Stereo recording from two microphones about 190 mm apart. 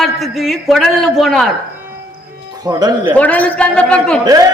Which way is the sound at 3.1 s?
10° left (ahead or behind).